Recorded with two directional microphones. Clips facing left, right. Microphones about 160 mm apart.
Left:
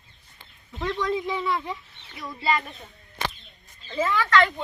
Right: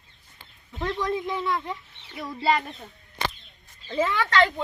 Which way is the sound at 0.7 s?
5° right (ahead or behind).